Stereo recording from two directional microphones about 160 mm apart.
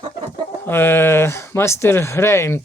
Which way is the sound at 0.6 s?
15° left (ahead or behind).